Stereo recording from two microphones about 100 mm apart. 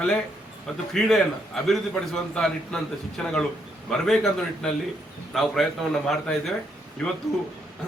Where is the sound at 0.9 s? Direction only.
Centre (ahead or behind).